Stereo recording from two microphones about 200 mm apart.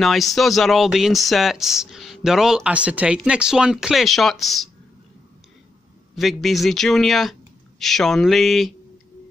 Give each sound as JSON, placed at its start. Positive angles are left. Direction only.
{"t": 0.0, "sound": "speech", "side_deg": 0}
{"t": 6.1, "sound": "speech", "side_deg": 0}